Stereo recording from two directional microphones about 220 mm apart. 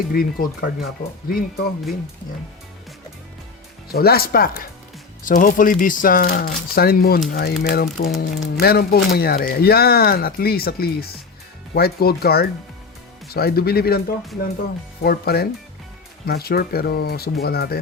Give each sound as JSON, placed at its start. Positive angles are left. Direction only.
{"t": 0.1, "sound": "speech", "side_deg": 40}
{"t": 3.9, "sound": "speech", "side_deg": 45}
{"t": 15.0, "sound": "speech", "side_deg": 45}